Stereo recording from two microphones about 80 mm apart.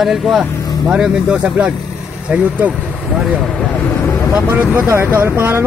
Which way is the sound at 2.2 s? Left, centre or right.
Centre.